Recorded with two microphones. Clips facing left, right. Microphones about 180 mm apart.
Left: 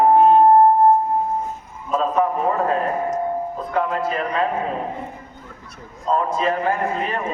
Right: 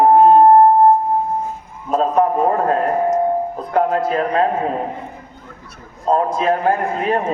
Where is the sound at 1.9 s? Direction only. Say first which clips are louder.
Right 4 dB; 50° right (ahead or behind).